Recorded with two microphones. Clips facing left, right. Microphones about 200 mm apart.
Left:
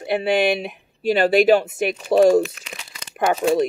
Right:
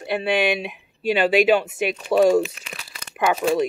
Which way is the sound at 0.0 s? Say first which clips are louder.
Left 3 dB; 45° left (ahead or behind).